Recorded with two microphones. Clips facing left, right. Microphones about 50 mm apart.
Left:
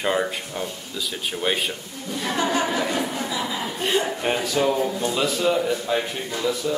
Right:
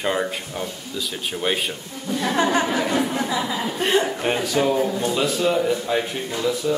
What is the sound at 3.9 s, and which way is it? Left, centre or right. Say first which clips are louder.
Speech: right 2 dB; centre.